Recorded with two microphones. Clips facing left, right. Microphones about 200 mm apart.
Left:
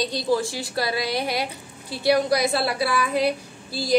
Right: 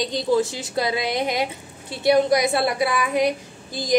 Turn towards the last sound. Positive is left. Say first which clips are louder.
# even
turn(degrees=-15)  # may be behind; listen again after turning